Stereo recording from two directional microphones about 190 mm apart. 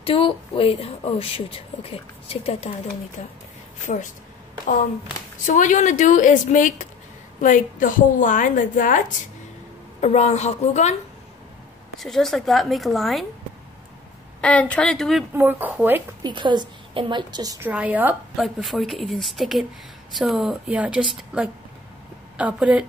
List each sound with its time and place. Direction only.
0.0 s speech: 30° left (ahead or behind)
5.5 s a woman's voice: 40° left (ahead or behind)
12.0 s a woman's voice: centre (ahead or behind)
14.4 s a woman's voice: 5° left (ahead or behind)
15.3 s speech: 10° right (ahead or behind)
16.2 s a woman's voice: 25° right (ahead or behind)
17.6 s a woman's voice: 10° right (ahead or behind)